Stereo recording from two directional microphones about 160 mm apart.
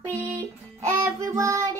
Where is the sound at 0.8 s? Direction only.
20° right (ahead or behind).